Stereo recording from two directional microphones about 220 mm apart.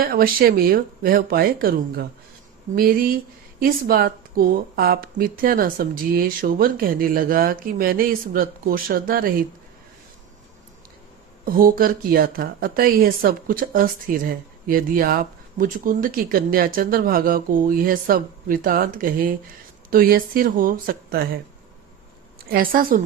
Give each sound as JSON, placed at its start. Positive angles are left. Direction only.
{"t": 0.0, "sound": "speech", "side_deg": -40}
{"t": 11.4, "sound": "speech", "side_deg": -40}
{"t": 22.4, "sound": "a woman's voice", "side_deg": -40}